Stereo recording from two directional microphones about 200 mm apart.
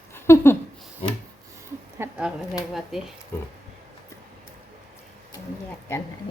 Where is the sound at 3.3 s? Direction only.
10° left (ahead or behind).